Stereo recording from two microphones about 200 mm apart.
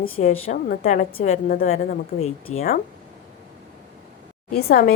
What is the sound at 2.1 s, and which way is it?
Speech, 55° left (ahead or behind).